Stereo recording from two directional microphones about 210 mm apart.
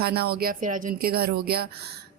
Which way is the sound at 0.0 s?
50° right (ahead or behind).